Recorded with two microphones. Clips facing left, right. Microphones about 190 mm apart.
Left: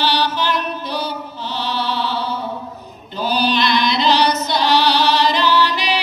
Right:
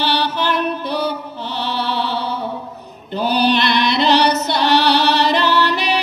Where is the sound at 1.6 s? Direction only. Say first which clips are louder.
Right 1 dB; 60° right (ahead or behind).